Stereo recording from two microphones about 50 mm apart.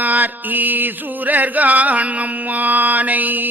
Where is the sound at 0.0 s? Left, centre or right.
Right.